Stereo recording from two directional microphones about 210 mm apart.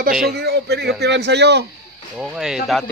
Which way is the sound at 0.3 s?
50° right (ahead or behind).